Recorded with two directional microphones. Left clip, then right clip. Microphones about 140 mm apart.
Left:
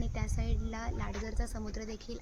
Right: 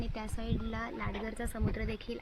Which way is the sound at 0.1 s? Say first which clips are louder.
Right 2 dB; 85° right.